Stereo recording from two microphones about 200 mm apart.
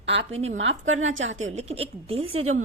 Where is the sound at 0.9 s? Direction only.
80° right.